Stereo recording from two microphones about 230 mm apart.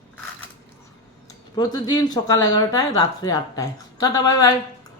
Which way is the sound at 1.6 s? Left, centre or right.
Centre.